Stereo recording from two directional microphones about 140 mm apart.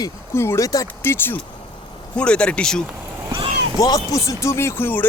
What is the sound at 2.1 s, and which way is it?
Music, 5° left (ahead or behind).